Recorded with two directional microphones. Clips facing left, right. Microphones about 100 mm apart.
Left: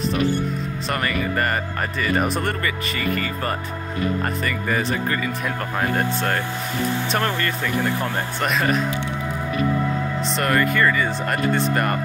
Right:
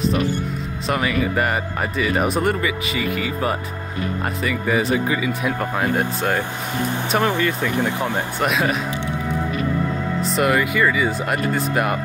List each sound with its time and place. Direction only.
0.8 s speech: 5° right (ahead or behind)
8.4 s speech: 5° right (ahead or behind)
10.2 s speech: 5° right (ahead or behind)